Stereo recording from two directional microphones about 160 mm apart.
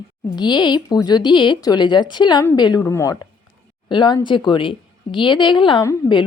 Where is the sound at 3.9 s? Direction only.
30° left (ahead or behind).